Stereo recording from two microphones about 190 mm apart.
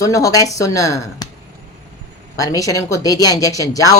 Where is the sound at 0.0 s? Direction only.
15° left (ahead or behind).